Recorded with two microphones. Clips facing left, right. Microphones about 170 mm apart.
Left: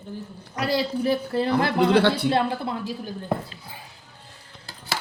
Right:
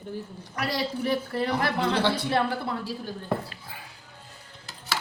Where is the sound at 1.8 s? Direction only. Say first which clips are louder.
Left 9 dB; 65° left (ahead or behind).